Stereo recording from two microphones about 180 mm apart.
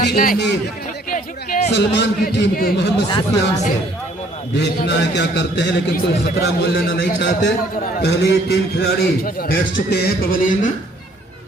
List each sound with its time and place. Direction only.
0.0 s a man's voice: 60° left (ahead or behind)
1.1 s music: 50° left (ahead or behind)
1.7 s a man's voice: 70° left (ahead or behind)
3.1 s speech: 20° left (ahead or behind)
4.5 s a man's voice: 70° left (ahead or behind)
7.9 s a man's voice: 60° left (ahead or behind)